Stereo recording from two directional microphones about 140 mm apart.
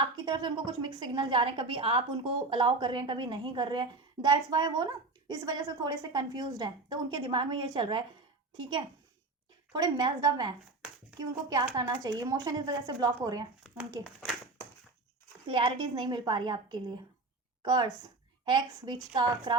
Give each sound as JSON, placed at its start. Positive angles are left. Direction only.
{"t": 0.3, "sound": "a woman's voice", "side_deg": -30}
{"t": 9.7, "sound": "a woman's voice", "side_deg": -30}
{"t": 15.4, "sound": "a woman's voice", "side_deg": -35}